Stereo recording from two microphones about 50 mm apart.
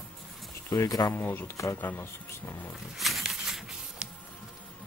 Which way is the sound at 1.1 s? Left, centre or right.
Left.